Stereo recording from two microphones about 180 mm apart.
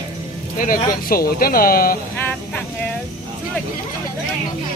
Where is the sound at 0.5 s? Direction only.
50° left (ahead or behind).